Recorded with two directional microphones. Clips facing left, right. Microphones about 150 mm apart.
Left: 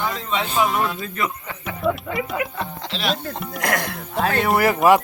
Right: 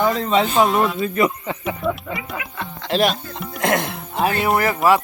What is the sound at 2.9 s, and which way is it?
Speech, 50° right (ahead or behind).